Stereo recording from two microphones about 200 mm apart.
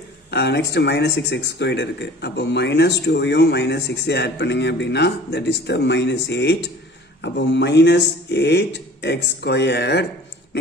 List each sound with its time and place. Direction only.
0.3 s speech: 55° left (ahead or behind)